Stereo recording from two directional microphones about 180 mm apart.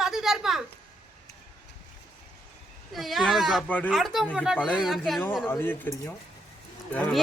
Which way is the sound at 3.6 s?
10° left (ahead or behind).